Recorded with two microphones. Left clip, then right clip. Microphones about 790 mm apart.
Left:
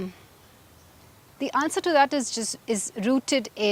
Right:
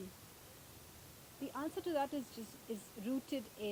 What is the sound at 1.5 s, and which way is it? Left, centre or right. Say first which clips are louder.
Speech: left 18 dB; left.